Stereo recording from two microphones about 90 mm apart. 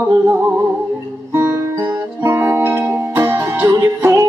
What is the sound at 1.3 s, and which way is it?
Music, 35° right (ahead or behind).